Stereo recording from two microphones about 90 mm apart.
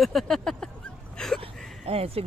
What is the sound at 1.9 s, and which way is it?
Speech, 90° right.